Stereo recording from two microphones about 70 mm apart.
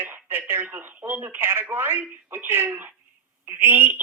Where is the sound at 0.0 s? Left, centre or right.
Right.